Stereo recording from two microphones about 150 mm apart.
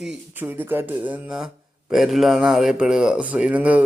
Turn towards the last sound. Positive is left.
turn(degrees=-10)  # may be behind; listen again after turning